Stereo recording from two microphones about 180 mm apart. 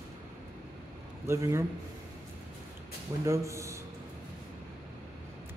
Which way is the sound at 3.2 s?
15° right (ahead or behind).